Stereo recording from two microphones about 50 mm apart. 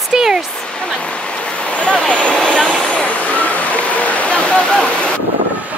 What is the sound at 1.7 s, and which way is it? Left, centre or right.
Speech, left.